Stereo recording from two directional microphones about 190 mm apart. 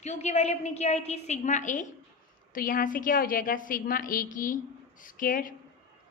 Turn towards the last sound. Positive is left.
turn(degrees=45)  # may be behind; listen again after turning